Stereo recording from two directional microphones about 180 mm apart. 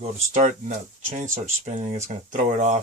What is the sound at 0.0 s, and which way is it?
Speech, 45° right (ahead or behind).